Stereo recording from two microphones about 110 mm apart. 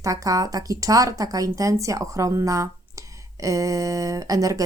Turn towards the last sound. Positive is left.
turn(degrees=-30)  # may be behind; listen again after turning